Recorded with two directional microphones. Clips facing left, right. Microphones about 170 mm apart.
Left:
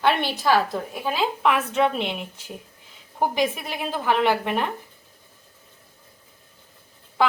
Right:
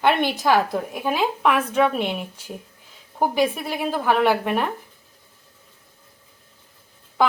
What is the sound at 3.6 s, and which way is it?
Speech, 10° right (ahead or behind).